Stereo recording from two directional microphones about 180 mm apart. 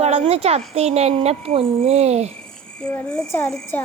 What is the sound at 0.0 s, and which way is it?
Speech, 35° right (ahead or behind).